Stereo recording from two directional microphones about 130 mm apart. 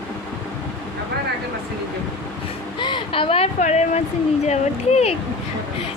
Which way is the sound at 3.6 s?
60° left (ahead or behind).